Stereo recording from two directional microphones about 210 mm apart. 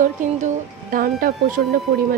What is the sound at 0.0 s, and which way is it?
A woman's voice, 35° right (ahead or behind).